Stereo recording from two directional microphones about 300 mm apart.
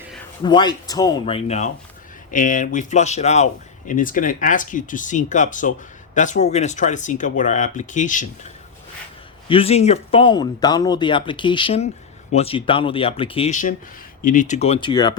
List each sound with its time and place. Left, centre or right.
0.4 s speech: centre
9.5 s speech: centre